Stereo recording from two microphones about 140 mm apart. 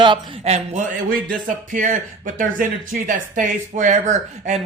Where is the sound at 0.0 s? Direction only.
35° right (ahead or behind); by 3.5 s 75° right (ahead or behind).